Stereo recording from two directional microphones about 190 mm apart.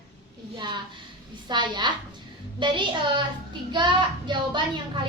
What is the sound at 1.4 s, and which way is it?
A child's voice, 25° right (ahead or behind).